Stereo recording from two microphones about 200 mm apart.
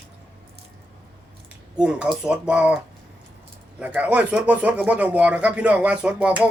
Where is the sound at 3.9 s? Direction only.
5° right (ahead or behind).